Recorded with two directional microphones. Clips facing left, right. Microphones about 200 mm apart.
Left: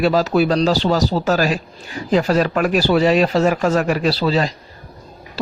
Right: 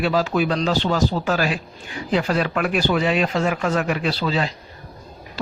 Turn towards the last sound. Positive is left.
turn(degrees=40)  # may be behind; listen again after turning